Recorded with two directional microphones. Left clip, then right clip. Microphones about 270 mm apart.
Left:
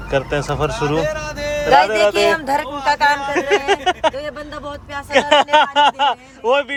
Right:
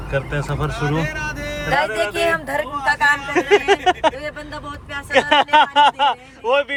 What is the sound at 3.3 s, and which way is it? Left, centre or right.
Speech, centre.